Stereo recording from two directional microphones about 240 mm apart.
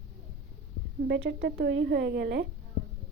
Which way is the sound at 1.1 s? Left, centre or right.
Right.